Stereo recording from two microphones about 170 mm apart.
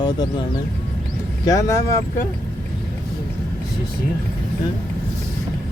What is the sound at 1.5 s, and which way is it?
Speech, 20° left (ahead or behind).